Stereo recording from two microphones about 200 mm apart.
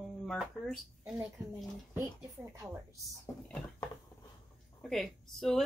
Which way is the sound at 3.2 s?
10° left (ahead or behind).